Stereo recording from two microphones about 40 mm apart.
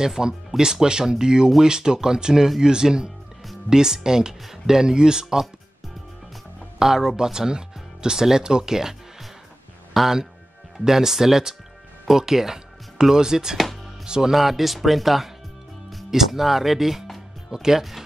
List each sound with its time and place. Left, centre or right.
0.0 s speech: centre
6.8 s speech: centre
14.3 s speech: centre